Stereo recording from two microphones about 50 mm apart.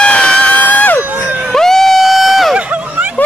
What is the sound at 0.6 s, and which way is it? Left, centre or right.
Crowd, left.